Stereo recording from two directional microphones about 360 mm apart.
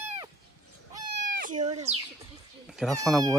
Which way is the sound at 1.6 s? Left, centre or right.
Centre.